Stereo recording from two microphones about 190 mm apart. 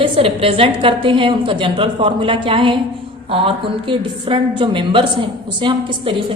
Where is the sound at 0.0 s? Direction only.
30° right (ahead or behind).